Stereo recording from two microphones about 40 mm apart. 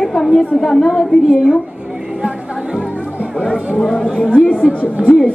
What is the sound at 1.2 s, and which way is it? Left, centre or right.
Speech, centre.